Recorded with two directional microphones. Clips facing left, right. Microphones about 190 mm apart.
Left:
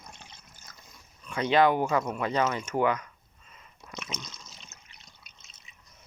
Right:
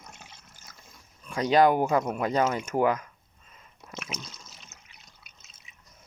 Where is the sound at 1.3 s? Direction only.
40° right (ahead or behind).